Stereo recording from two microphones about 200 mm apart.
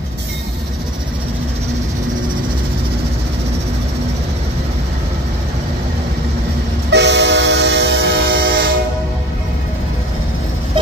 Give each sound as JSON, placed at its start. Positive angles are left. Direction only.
{"t": 6.9, "sound": "train", "side_deg": -60}